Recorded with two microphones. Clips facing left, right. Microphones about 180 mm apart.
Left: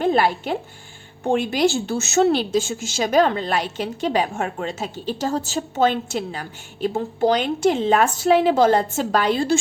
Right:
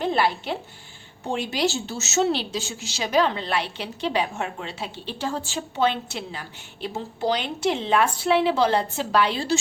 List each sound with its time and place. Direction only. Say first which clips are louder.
0.0 s a woman's voice: left 4 dB; 50° left (ahead or behind)